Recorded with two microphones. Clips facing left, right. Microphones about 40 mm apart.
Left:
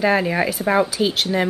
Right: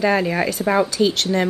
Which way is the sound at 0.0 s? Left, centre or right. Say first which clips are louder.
Even; centre.